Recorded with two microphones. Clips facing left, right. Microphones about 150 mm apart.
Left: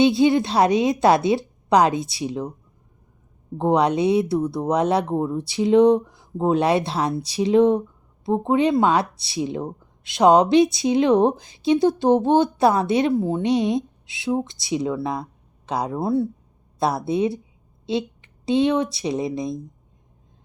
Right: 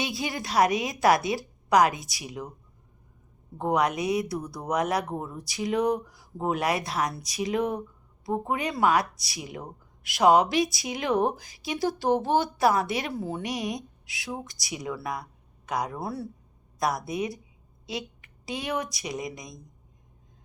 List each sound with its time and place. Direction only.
0.0 s speech: 25° left (ahead or behind)
3.6 s speech: 30° left (ahead or behind)